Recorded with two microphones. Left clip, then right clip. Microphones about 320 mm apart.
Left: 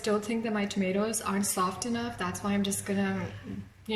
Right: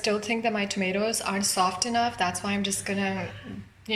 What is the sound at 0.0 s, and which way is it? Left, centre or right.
A woman's voice, centre.